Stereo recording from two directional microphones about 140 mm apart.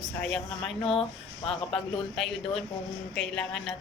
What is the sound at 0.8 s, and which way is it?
Speech, 40° left (ahead or behind).